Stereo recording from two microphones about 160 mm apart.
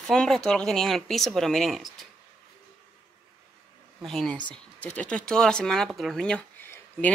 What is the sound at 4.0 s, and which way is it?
Speech, centre (ahead or behind).